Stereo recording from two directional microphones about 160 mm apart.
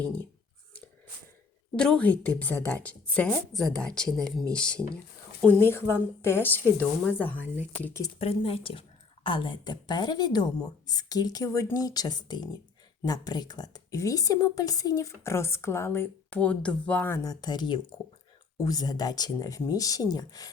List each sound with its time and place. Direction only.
0.0 s a woman's voice: 10° left (ahead or behind)
1.7 s a woman's voice: 5° left (ahead or behind)
8.2 s a woman's voice: 35° left (ahead or behind); by 17.2 s 10° left (ahead or behind)
17.2 s a woman's voice: 25° left (ahead or behind)